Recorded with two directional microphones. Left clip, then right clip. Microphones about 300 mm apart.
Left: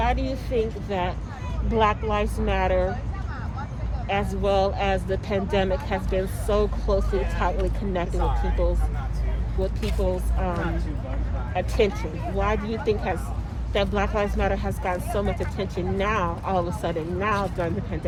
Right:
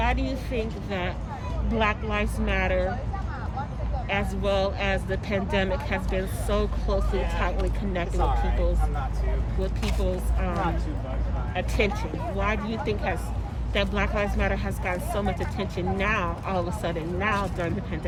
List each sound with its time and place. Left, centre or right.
0.0 s speech: centre
4.1 s speech: centre
8.2 s speech: right
10.0 s speech: centre
11.6 s speech: centre